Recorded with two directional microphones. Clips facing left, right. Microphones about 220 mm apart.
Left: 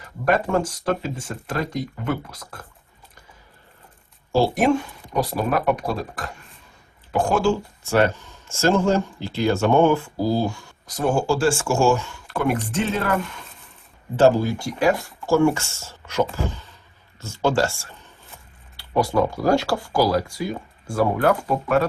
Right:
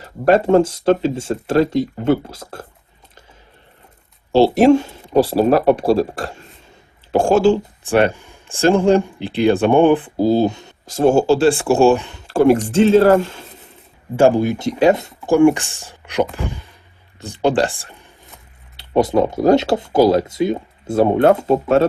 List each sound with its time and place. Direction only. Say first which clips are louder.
0.0 s speech: right 7 dB; 25° right (ahead or behind)
4.4 s speech: right 8 dB; 25° right (ahead or behind)
14.2 s speech: right 3 dB; 15° right (ahead or behind)